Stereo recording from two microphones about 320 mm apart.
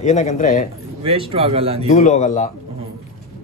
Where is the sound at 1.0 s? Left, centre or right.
Centre.